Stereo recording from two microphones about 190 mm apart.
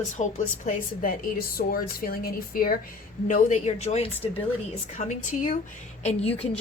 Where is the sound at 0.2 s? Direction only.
40° left (ahead or behind).